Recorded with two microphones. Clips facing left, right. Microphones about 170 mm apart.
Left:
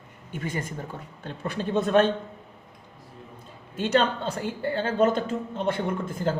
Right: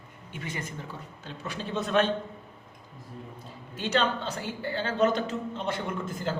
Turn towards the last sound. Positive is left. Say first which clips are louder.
# left 5 dB
turn(degrees=50)  # may be behind; listen again after turning